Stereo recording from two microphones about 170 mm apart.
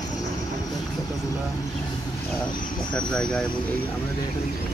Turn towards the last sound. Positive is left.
turn(degrees=5)  # may be behind; listen again after turning